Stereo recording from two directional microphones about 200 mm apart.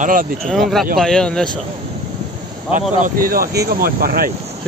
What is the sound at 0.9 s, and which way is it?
Speech, centre (ahead or behind).